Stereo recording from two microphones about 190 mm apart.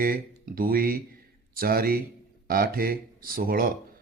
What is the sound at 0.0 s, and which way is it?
Speech, 50° right (ahead or behind).